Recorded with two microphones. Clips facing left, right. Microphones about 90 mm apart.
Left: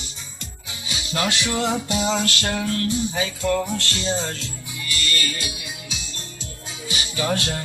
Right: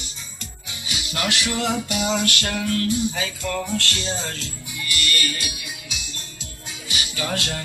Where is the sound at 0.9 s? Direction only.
30° left (ahead or behind).